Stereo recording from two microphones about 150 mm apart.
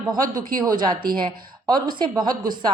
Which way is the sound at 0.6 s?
25° right (ahead or behind).